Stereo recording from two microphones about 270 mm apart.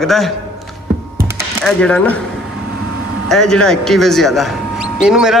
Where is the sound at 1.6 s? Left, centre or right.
Centre.